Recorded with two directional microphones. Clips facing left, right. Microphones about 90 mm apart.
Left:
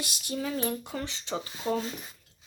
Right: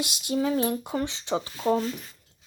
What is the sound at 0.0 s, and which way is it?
Speech, 25° right (ahead or behind).